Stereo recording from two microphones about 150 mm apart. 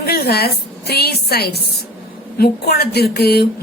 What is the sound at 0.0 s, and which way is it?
A woman's voice, 90° left.